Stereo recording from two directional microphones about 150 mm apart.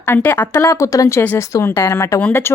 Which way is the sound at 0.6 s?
25° left (ahead or behind).